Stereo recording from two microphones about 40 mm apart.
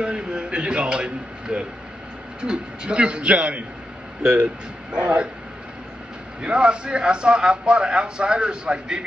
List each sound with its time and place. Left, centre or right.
0.0 s a man's voice: right
4.2 s a man's voice: right
6.4 s a man's voice: right